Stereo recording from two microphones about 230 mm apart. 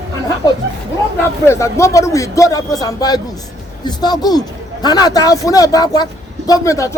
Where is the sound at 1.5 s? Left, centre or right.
Centre.